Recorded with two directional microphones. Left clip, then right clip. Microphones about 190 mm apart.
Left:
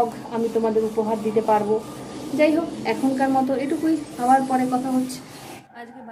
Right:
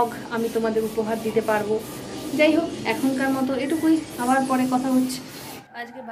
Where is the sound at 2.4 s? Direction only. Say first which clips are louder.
Even; 5° left (ahead or behind).